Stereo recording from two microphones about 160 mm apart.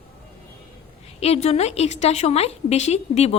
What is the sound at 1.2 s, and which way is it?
A woman's voice, 40° left (ahead or behind).